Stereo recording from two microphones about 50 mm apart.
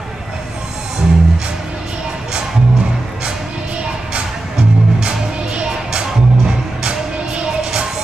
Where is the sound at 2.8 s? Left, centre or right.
Centre.